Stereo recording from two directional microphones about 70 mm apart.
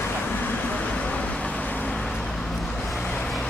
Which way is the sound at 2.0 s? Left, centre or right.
Centre.